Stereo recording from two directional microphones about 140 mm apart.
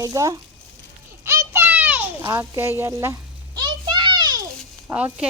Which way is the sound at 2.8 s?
20° right (ahead or behind).